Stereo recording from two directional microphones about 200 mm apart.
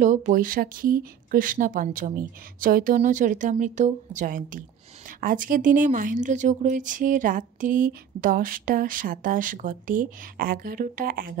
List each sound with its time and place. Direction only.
0.0 s speech: 40° right (ahead or behind)